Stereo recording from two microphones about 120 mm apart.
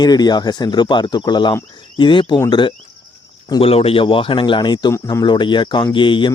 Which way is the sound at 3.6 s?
55° left (ahead or behind).